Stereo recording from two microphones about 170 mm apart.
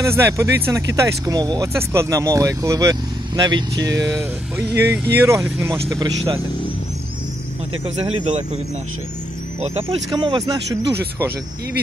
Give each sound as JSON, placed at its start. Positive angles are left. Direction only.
{"t": 0.0, "sound": "speech", "side_deg": -15}
{"t": 7.8, "sound": "speech", "side_deg": -30}
{"t": 9.6, "sound": "speech", "side_deg": -35}